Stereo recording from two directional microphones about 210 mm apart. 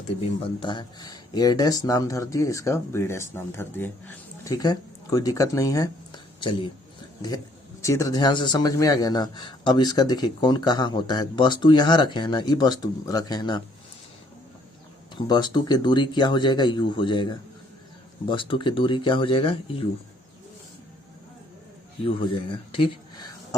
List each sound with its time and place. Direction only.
0.6 s speech: 20° left (ahead or behind)
7.8 s speech: 15° left (ahead or behind)
15.1 s speech: 20° left (ahead or behind)
22.0 s speech: 25° left (ahead or behind)